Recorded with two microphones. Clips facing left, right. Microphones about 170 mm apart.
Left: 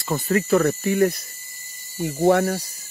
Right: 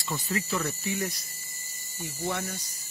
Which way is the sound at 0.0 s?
55° left (ahead or behind).